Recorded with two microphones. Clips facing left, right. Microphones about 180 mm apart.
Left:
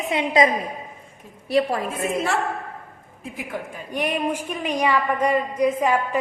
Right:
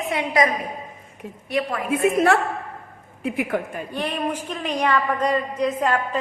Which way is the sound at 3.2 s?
65° right (ahead or behind).